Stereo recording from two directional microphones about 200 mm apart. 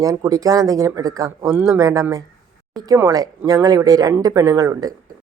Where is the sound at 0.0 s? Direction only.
20° right (ahead or behind).